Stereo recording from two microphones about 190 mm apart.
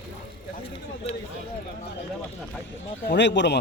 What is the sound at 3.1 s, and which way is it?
Speech, 70° left (ahead or behind).